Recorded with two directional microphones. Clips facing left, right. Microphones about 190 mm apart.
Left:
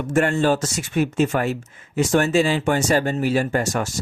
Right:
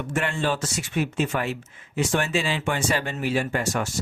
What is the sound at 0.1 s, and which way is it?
Speech, 45° left (ahead or behind).